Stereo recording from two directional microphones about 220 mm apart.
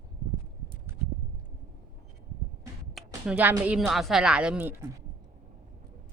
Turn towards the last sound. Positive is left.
turn(degrees=-5)  # may be behind; listen again after turning